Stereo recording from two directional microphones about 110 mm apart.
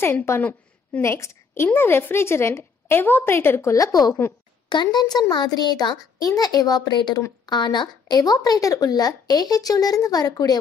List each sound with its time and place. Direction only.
0.0 s a woman's voice: 25° left (ahead or behind)
1.0 s a woman's voice: 25° left (ahead or behind)